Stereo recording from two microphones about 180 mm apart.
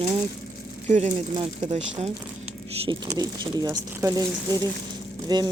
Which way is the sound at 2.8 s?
20° right (ahead or behind).